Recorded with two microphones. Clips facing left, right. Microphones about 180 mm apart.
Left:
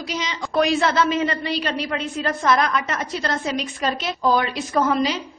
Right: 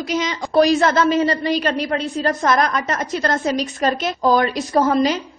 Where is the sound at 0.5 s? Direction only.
40° right (ahead or behind).